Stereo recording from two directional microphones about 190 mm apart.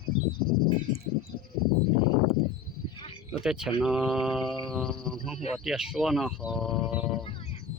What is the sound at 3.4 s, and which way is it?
Speech, 5° right (ahead or behind).